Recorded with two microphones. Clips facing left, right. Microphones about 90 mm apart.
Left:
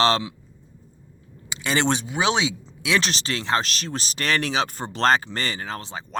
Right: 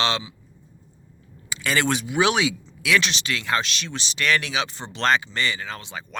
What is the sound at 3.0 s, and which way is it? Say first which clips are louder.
Speech: left 1 dB; 40° left (ahead or behind).